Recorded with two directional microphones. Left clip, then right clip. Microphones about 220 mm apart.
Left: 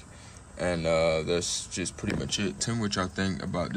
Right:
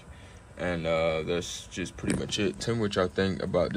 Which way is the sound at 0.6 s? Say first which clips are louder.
Left 2 dB; 20° left (ahead or behind).